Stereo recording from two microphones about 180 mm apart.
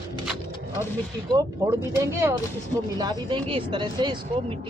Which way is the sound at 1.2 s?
20° right (ahead or behind).